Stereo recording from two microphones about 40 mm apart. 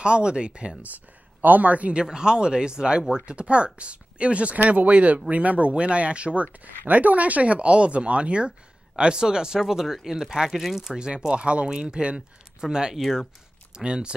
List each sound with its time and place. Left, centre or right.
0.0 s speech: right
1.4 s speech: right
2.0 s speech: centre
11.3 s speech: right